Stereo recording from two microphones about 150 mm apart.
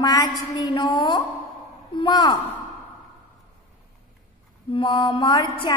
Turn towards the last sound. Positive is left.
turn(degrees=30)  # may be behind; listen again after turning